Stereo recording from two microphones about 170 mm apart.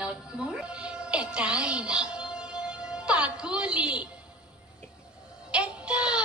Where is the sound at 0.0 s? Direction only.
5° right (ahead or behind).